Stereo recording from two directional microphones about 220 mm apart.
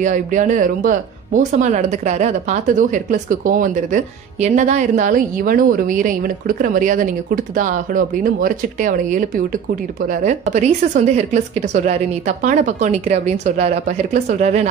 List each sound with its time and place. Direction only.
0.0 s speech: 35° right (ahead or behind)